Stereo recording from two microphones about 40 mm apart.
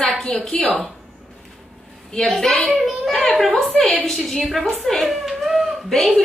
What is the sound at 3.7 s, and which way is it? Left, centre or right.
Speech, centre.